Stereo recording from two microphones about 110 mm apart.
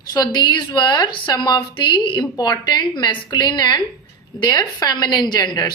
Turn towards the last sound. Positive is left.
turn(degrees=40)  # may be behind; listen again after turning